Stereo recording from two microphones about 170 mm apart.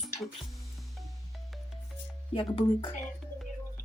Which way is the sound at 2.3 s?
30° left (ahead or behind).